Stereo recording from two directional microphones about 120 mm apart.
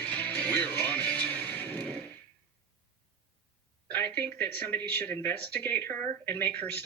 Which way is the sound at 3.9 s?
15° left (ahead or behind).